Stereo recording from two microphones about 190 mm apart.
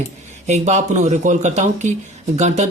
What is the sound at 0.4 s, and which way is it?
Speech, 35° right (ahead or behind).